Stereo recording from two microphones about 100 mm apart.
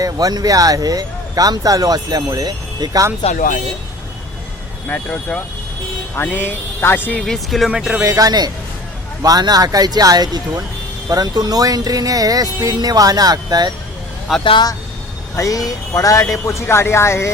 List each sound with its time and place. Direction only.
0.0 s speech: 40° right (ahead or behind)
4.9 s speech: 10° left (ahead or behind)
7.2 s speech: centre (ahead or behind)
8.0 s speech: 35° right (ahead or behind)
14.3 s speech: centre (ahead or behind)
15.4 s speech: 35° left (ahead or behind)